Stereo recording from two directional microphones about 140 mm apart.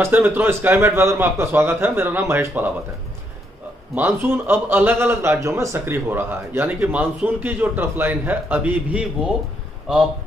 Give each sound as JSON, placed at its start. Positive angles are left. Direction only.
{"t": 0.0, "sound": "a man's voice", "side_deg": -15}
{"t": 3.9, "sound": "a man's voice", "side_deg": -15}